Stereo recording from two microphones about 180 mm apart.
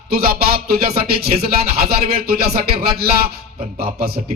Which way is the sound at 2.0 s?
60° right (ahead or behind).